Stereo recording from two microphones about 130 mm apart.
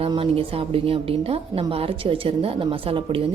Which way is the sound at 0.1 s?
45° right (ahead or behind).